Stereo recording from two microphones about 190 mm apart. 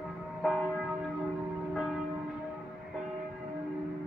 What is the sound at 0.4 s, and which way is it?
Church bell, centre (ahead or behind).